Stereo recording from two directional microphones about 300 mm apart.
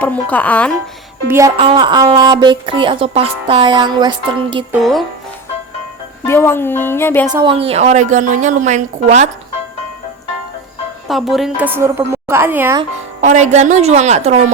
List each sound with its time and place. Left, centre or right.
0.0 s speech: centre
1.3 s a woman's voice: centre
4.7 s speech: centre
6.2 s a woman's voice: centre
7.3 s a woman's voice: centre
11.1 s a woman's voice: centre
13.2 s a woman's voice: right